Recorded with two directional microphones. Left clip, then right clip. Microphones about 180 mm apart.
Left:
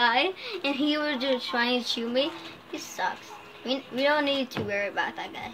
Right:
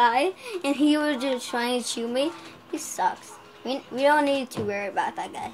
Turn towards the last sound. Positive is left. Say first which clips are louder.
# right 3 dB
turn(degrees=-55)  # may be behind; listen again after turning